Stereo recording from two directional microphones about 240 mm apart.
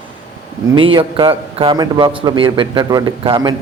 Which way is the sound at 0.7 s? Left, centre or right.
Right.